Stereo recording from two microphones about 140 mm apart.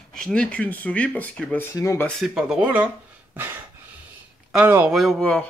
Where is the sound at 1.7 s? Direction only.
20° left (ahead or behind).